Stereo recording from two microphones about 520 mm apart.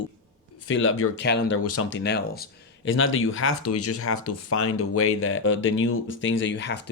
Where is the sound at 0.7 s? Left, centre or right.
Left.